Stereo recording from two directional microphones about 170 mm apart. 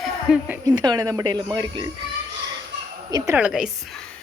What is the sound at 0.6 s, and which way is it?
Speech, 20° right (ahead or behind).